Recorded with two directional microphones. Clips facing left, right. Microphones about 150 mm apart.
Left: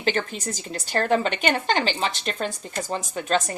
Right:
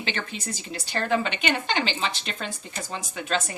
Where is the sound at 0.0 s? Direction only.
45° left (ahead or behind).